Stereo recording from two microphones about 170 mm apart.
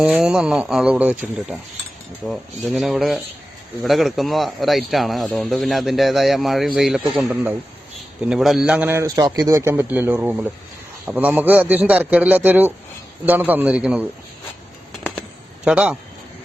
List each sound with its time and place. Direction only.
0.0 s a man's voice: 5° right (ahead or behind)
15.6 s a man's voice: 5° right (ahead or behind)